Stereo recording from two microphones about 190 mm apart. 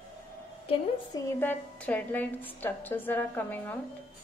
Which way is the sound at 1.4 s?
10° left (ahead or behind).